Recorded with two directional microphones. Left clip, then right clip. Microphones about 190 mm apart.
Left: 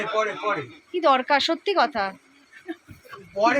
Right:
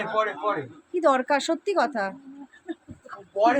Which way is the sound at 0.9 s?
15° right (ahead or behind).